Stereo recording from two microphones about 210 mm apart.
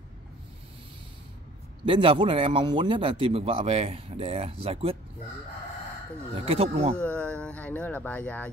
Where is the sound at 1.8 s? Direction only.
25° right (ahead or behind).